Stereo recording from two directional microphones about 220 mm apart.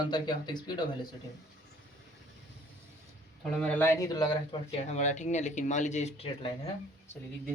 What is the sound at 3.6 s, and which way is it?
Speech, 10° left (ahead or behind).